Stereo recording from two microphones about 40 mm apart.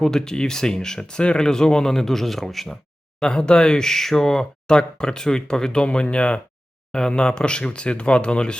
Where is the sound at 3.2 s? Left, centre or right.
Centre.